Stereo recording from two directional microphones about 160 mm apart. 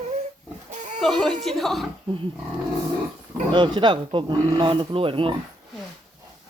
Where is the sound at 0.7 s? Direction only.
50° right (ahead or behind).